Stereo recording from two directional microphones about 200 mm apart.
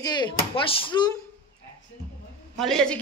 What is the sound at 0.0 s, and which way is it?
Speech, 20° left (ahead or behind).